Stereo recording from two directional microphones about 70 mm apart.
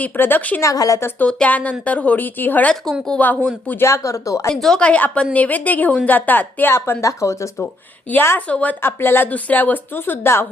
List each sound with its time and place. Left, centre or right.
0.0 s speech: left
0.6 s speech: left
1.3 s speech: centre
3.8 s speech: left
4.4 s a woman's voice: centre
4.9 s speech: left
7.0 s speech: left
8.1 s a woman's voice: left
8.4 s a woman's voice: centre
8.8 s speech: left